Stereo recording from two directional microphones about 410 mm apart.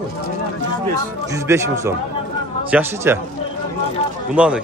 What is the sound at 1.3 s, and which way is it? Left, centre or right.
Speech, centre.